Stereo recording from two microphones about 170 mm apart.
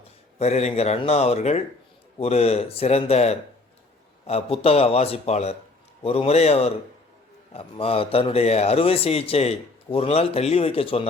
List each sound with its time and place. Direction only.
0.3 s a man's voice: 40° left (ahead or behind)